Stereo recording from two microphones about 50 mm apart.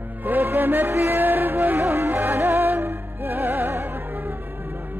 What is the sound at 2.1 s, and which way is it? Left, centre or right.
Music, right.